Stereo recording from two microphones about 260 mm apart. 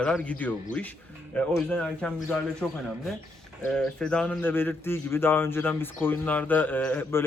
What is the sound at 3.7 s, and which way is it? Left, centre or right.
A man's voice, centre.